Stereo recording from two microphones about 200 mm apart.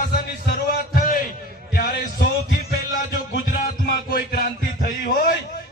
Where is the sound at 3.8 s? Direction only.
50° left (ahead or behind).